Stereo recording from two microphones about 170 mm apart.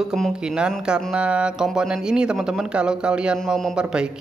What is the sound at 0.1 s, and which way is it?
Speech, centre (ahead or behind).